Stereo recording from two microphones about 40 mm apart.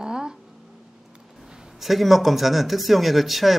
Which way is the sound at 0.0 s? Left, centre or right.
Centre.